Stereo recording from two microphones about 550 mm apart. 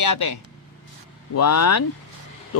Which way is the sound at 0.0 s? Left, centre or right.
Left.